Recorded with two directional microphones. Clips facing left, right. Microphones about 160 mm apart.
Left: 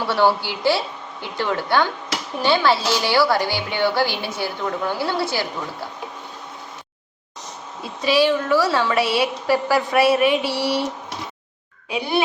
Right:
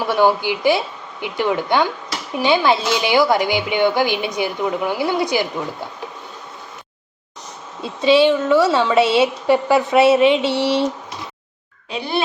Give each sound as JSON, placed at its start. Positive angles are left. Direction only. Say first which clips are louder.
{"t": 0.0, "sound": "speech", "louder": "right 3 dB", "side_deg": -15}
{"t": 7.8, "sound": "a woman's voice", "louder": "right 5 dB", "side_deg": -25}
{"t": 11.9, "sound": "speech", "louder": "left 1 dB", "side_deg": 10}